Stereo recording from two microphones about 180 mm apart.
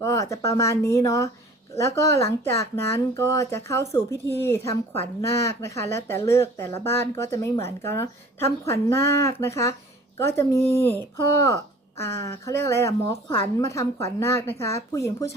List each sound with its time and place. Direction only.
0.0 s a woman's voice: 15° left (ahead or behind)